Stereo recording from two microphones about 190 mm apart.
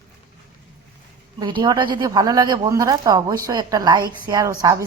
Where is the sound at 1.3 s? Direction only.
25° right (ahead or behind).